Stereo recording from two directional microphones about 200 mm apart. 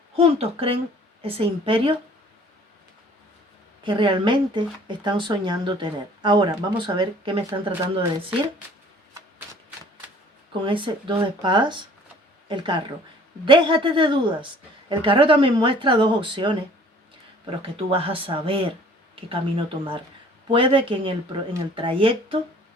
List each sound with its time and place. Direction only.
0.2 s speech: 30° right (ahead or behind)
3.8 s speech: 25° right (ahead or behind)
10.6 s speech: 25° right (ahead or behind)
17.6 s speech: 30° right (ahead or behind)